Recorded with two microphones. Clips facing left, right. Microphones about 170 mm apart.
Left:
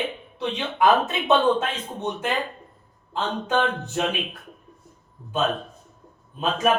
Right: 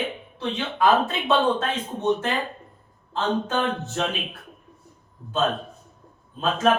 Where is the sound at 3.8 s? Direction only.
10° left (ahead or behind).